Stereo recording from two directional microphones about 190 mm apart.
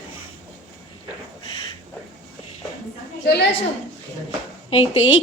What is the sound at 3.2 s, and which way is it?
Speech, 60° left (ahead or behind).